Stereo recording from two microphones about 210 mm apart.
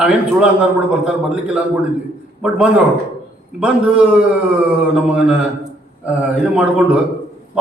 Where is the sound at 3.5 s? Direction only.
5° right (ahead or behind).